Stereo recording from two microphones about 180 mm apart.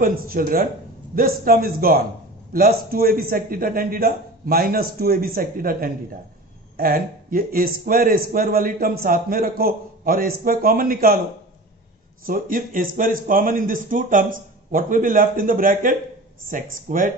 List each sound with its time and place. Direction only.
0.0 s a man's voice: 55° right (ahead or behind)
12.3 s a man's voice: 50° right (ahead or behind)